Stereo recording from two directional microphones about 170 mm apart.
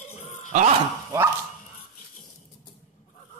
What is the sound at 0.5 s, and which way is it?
Speech, 45° right (ahead or behind).